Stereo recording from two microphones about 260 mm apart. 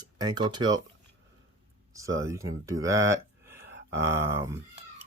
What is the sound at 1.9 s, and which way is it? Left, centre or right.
Speech, centre.